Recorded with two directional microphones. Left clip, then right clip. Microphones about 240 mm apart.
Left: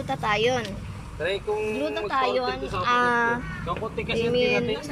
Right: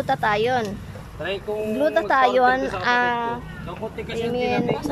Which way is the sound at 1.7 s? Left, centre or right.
Right.